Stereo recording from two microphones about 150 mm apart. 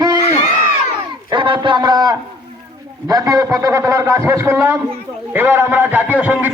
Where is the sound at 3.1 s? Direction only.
25° right (ahead or behind).